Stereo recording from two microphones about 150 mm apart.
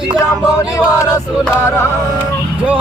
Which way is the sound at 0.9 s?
20° left (ahead or behind).